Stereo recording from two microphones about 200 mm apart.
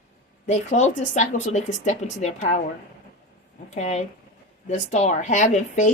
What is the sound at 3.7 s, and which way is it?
Speech, 35° left (ahead or behind).